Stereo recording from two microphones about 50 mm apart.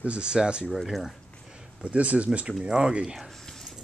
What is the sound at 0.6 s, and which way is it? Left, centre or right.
Speech, centre.